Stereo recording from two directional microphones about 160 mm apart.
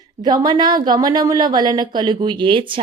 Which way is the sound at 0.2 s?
25° right (ahead or behind).